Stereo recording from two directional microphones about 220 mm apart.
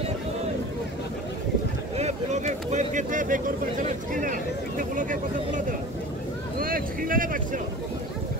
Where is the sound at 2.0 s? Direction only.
30° right (ahead or behind).